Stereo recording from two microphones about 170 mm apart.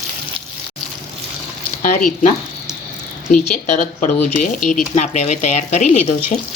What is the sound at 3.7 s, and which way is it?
Speech, 50° left (ahead or behind).